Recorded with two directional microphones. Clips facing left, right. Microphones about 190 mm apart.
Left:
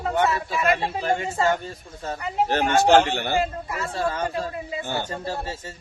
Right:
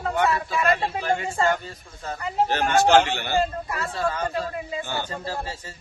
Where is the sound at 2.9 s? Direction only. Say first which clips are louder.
Left 1 dB; 50° left (ahead or behind).